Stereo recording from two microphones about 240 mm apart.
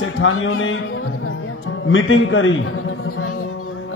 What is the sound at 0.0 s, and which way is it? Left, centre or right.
A man's voice, left.